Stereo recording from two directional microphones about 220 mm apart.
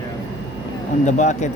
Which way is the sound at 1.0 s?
30° left (ahead or behind).